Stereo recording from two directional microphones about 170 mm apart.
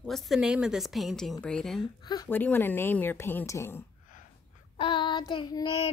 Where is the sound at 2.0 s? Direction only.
25° left (ahead or behind).